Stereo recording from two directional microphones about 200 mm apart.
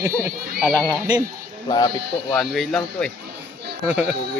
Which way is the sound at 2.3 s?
Centre (ahead or behind).